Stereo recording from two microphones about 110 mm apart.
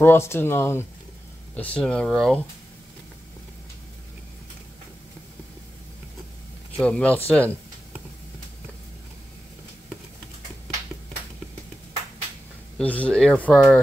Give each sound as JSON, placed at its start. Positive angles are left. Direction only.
{"t": 0.0, "sound": "speech", "side_deg": 20}
{"t": 1.6, "sound": "speech", "side_deg": 10}
{"t": 6.8, "sound": "speech", "side_deg": 10}
{"t": 12.7, "sound": "speech", "side_deg": 15}